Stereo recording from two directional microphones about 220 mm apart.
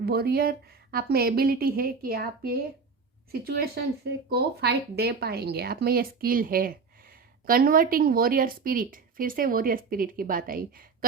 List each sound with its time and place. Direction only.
0.0 s speech: 45° right (ahead or behind)